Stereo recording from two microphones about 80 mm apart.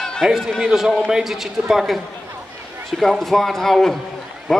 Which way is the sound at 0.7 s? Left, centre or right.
Centre.